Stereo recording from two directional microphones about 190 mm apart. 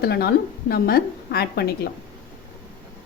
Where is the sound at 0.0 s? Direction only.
55° left (ahead or behind).